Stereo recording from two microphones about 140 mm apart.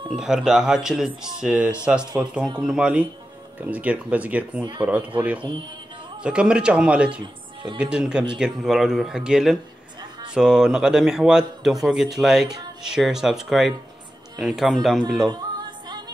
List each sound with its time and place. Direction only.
0.2 s a man's voice: 5° right (ahead or behind)
15.2 s yodeling: 30° right (ahead or behind)